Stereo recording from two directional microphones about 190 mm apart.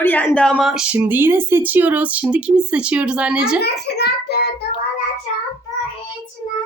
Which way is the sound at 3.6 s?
60° left (ahead or behind).